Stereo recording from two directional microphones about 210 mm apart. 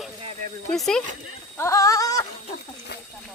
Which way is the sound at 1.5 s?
15° left (ahead or behind).